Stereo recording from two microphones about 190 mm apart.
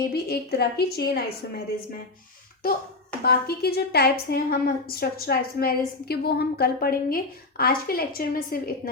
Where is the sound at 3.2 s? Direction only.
55° left (ahead or behind).